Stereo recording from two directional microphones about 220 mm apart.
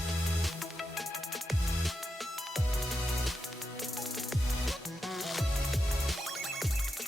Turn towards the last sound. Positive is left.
turn(degrees=0)  # may be behind; listen again after turning